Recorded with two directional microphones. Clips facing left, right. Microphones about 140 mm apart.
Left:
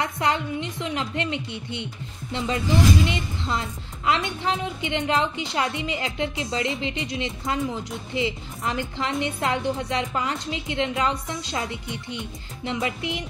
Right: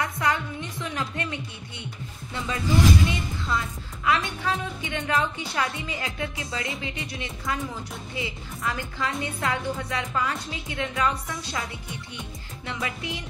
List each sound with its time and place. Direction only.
0.0 s a woman's voice: 25° left (ahead or behind)